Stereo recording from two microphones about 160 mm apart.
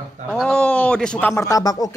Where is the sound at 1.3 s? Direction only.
20° left (ahead or behind).